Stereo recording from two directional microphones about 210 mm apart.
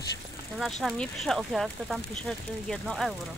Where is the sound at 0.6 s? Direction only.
Centre (ahead or behind).